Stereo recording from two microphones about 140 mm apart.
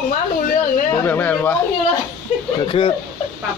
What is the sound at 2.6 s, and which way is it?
Speech, 40° left (ahead or behind).